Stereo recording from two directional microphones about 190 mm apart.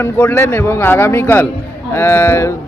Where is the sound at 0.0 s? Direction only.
10° left (ahead or behind).